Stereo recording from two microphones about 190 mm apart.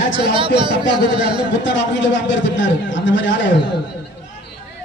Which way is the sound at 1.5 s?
70° left (ahead or behind).